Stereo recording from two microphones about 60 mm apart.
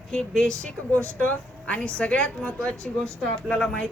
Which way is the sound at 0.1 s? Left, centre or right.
Centre.